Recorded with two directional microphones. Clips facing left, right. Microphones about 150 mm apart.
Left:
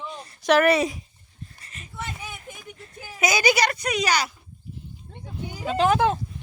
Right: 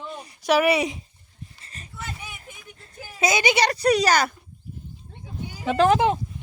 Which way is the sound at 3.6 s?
35° right (ahead or behind).